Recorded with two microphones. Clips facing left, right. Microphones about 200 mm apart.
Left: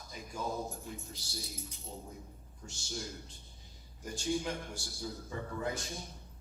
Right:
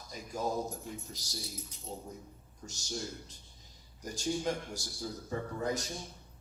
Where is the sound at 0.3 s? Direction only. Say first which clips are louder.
Right 4 dB; 40° right (ahead or behind).